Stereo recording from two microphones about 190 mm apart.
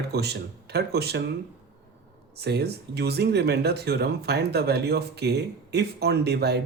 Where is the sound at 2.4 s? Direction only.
60° right (ahead or behind).